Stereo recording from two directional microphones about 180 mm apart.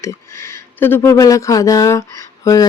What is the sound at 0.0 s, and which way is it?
Speech, 15° left (ahead or behind).